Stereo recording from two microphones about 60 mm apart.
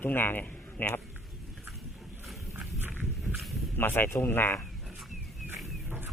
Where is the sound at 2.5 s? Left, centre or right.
Right.